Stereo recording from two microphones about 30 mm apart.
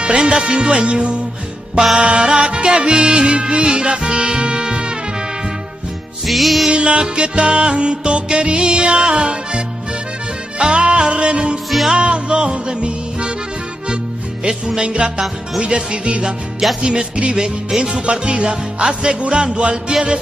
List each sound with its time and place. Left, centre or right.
0.0 s music: right
6.2 s music: centre
6.7 s music: right
10.6 s music: right
14.8 s music: right
17.4 s music: centre
17.8 s music: right